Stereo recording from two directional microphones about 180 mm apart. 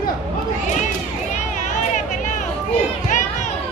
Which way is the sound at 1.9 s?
40° left (ahead or behind).